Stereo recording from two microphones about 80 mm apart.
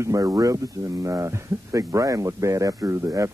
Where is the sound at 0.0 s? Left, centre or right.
Right.